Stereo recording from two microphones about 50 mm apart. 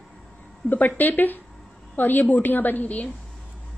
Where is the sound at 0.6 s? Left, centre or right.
Left.